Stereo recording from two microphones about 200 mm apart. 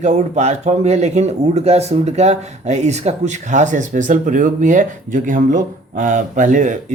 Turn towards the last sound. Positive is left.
turn(degrees=-40)  # may be behind; listen again after turning